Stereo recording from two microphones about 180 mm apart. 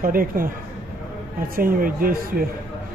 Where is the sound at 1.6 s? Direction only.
55° right (ahead or behind).